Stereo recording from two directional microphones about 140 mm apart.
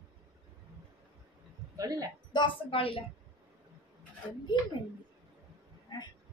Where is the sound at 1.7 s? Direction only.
25° right (ahead or behind).